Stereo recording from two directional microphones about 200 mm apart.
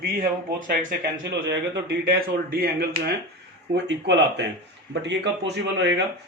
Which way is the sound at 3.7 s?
60° right (ahead or behind).